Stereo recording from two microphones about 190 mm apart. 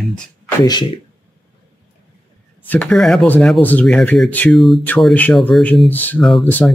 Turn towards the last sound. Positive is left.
turn(degrees=0)  # may be behind; listen again after turning